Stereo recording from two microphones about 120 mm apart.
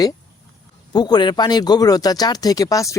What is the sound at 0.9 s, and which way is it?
Speech, 35° left (ahead or behind).